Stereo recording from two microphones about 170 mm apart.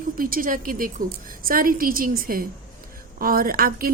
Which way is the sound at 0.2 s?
55° right (ahead or behind).